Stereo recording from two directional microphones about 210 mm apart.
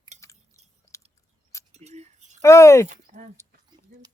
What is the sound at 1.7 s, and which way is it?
Keys jangling, 30° right (ahead or behind).